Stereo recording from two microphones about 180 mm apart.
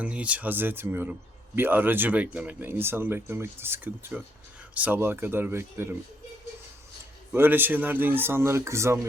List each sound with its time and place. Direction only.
0.0 s speech: 5° right (ahead or behind)
7.3 s speech: 10° right (ahead or behind)